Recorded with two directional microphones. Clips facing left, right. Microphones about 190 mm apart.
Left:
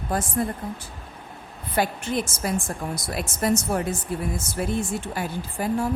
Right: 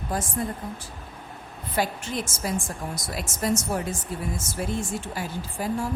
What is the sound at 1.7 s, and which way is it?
A woman's voice, 60° left (ahead or behind).